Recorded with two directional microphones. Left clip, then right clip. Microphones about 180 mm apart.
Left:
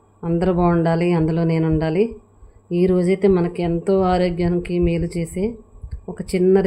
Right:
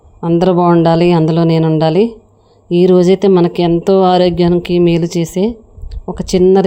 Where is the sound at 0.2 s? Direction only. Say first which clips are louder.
Right 8 dB; 45° right (ahead or behind).